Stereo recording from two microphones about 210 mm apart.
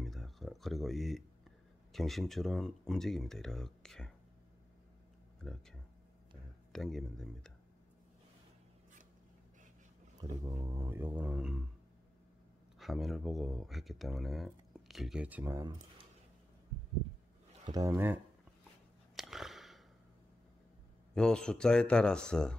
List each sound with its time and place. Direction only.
0.0 s a sound: centre (ahead or behind)
1.9 s speech: centre (ahead or behind)
5.4 s speech: 5° left (ahead or behind)
10.2 s a sound: 15° right (ahead or behind)
10.6 s speech: 10° right (ahead or behind)
12.7 s speech: centre (ahead or behind)
17.6 s speech: 15° right (ahead or behind)
19.1 s a sound: centre (ahead or behind)
21.1 s speech: 5° left (ahead or behind)